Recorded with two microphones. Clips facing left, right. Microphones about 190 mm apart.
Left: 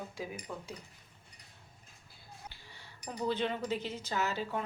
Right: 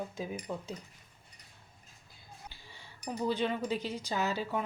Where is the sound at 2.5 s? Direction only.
15° right (ahead or behind).